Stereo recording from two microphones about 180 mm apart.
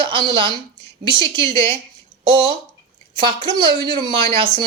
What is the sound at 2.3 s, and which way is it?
Speech, 25° right (ahead or behind).